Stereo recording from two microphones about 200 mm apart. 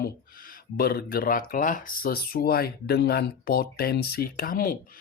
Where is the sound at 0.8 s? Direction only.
50° left (ahead or behind).